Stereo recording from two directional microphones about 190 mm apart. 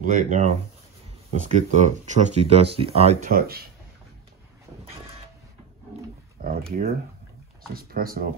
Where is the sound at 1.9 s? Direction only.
35° right (ahead or behind).